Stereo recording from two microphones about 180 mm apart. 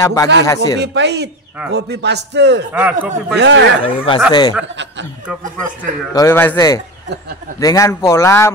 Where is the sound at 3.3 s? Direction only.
75° right (ahead or behind).